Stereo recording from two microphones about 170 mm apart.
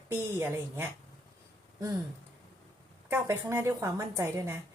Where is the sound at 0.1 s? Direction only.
15° right (ahead or behind).